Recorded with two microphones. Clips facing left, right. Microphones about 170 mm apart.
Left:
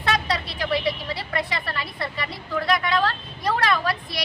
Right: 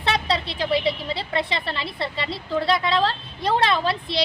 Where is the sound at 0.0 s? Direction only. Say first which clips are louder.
Right 1 dB; 25° right (ahead or behind).